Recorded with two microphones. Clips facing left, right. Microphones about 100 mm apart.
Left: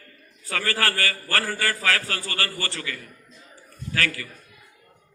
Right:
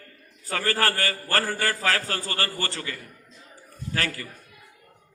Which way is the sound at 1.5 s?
25° right (ahead or behind).